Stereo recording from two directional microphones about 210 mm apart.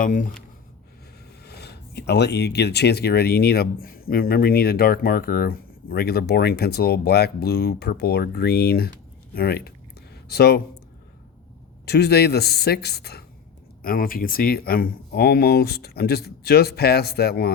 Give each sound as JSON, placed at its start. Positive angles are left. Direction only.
{"t": 0.0, "sound": "speech", "side_deg": 40}
{"t": 1.5, "sound": "speech", "side_deg": 50}
{"t": 11.9, "sound": "speech", "side_deg": 50}